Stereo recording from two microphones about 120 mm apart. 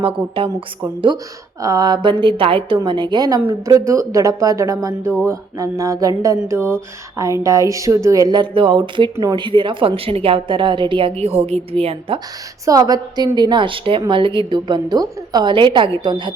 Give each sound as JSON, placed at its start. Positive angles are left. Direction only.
{"t": 0.0, "sound": "a woman's voice", "side_deg": -50}
{"t": 1.6, "sound": "a woman's voice", "side_deg": -30}
{"t": 9.1, "sound": "a woman's voice", "side_deg": -35}
{"t": 12.6, "sound": "a woman's voice", "side_deg": -30}